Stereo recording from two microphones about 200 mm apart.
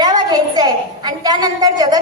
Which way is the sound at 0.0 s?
20° right (ahead or behind).